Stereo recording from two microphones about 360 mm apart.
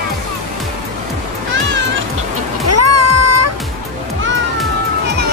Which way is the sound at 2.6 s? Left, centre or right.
Right.